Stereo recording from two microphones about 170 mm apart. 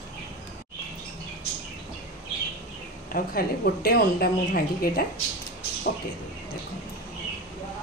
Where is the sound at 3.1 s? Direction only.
60° left (ahead or behind).